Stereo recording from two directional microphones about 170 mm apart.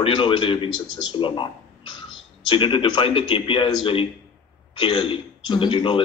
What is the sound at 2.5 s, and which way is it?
A man's voice, 30° left (ahead or behind).